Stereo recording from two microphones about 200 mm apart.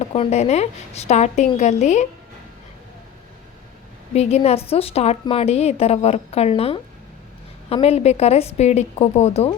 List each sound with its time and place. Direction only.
0.0 s a woman's voice: 30° left (ahead or behind)
4.1 s a woman's voice: 30° left (ahead or behind)